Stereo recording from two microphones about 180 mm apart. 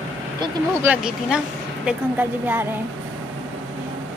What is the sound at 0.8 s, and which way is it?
Speech, 5° right (ahead or behind).